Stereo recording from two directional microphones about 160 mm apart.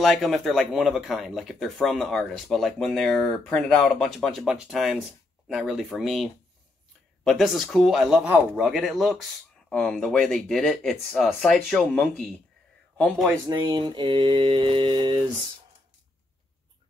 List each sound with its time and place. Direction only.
0.0 s speech: centre (ahead or behind)
7.2 s speech: centre (ahead or behind)
13.5 s speech: 30° right (ahead or behind)
14.5 s a sound: 30° right (ahead or behind)